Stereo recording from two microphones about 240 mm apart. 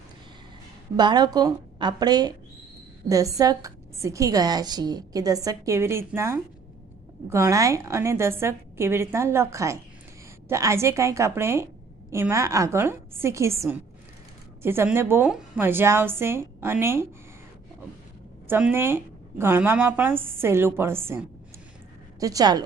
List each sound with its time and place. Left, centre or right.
0.9 s a woman's voice: centre
18.4 s a woman's voice: centre